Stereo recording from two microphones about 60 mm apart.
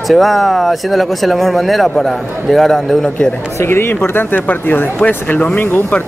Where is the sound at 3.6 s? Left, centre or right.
Left.